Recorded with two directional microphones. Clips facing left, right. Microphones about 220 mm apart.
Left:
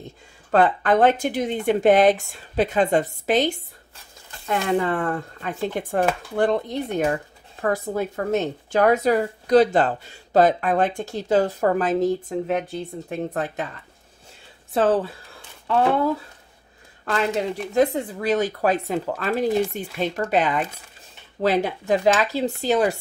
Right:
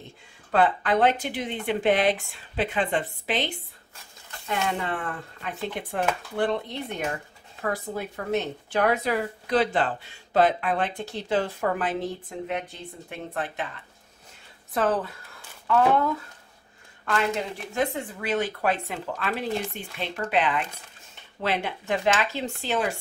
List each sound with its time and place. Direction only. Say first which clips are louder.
0.5 s speech: left 4 dB; 45° left (ahead or behind)
14.7 s speech: left 5 dB; 30° left (ahead or behind)